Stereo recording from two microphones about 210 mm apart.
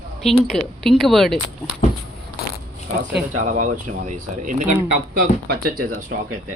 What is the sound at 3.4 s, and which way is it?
Speech, 35° right (ahead or behind).